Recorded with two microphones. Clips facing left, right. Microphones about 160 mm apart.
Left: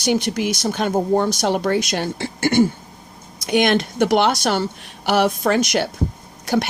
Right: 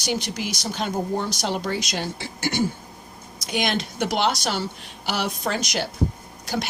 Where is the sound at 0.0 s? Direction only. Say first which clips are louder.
Left 8 dB; 55° left (ahead or behind).